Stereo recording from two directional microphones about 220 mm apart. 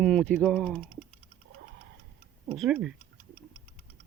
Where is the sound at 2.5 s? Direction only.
Centre (ahead or behind).